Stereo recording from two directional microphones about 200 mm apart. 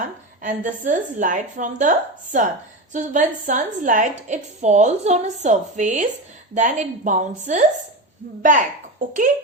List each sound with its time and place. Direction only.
0.0 s a woman's voice: 40° right (ahead or behind)
2.9 s a woman's voice: 40° right (ahead or behind)